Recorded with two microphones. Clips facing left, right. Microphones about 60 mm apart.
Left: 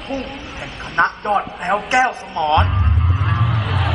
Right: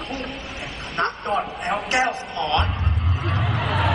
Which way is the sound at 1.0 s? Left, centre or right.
Left.